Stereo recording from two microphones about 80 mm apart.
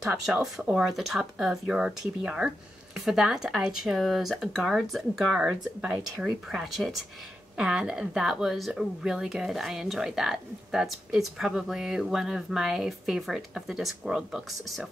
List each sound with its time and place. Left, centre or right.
0.0 s speech: centre